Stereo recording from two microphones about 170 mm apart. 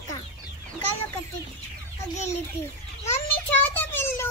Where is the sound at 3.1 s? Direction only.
15° left (ahead or behind).